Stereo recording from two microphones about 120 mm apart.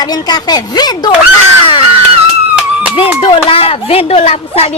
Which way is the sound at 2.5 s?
10° right (ahead or behind).